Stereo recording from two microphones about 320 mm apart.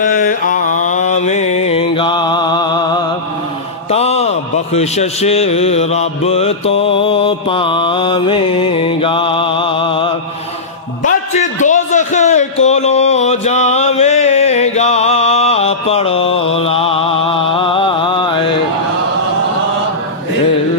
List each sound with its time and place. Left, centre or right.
0.0 s mantra: left
3.9 s a man's voice: centre
11.3 s a sound: left
16.5 s mantra: centre